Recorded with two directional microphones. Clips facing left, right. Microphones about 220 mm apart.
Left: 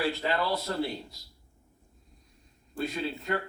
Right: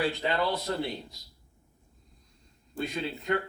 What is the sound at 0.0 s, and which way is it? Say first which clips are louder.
Speech: right 1 dB; 15° right (ahead or behind).